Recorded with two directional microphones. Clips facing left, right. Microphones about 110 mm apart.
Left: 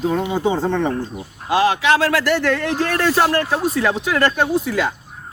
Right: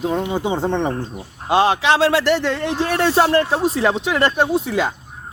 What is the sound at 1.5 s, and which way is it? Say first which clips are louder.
A man's voice: even; 25° right (ahead or behind).